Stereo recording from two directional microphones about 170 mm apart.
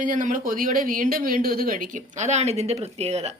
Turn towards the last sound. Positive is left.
turn(degrees=-40)  # may be behind; listen again after turning